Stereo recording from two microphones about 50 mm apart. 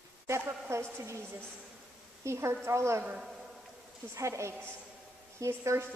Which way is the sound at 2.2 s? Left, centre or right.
Right.